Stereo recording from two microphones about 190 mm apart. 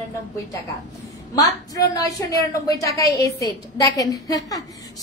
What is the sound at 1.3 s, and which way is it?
A woman's voice, 20° left (ahead or behind).